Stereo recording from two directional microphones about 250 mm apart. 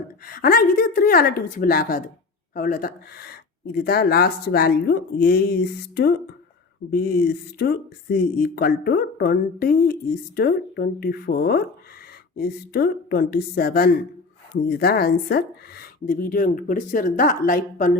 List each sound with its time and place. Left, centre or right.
0.3 s a woman's voice: left
7.6 s a woman's voice: left